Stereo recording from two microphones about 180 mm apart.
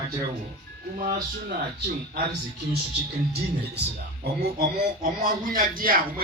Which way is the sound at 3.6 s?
65° right (ahead or behind).